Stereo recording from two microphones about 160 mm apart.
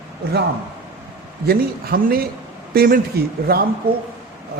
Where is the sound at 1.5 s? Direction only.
70° right (ahead or behind).